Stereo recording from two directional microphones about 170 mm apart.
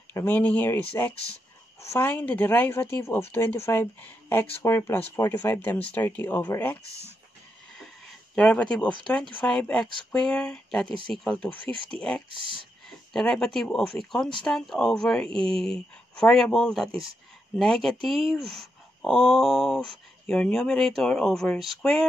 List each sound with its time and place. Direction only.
0.1 s speech: 10° left (ahead or behind)
6.9 s speech: 15° right (ahead or behind)
8.4 s speech: 5° left (ahead or behind)
13.1 s speech: 5° left (ahead or behind)